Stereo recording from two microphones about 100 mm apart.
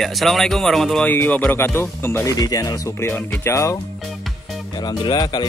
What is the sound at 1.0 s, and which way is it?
Speech, 15° left (ahead or behind).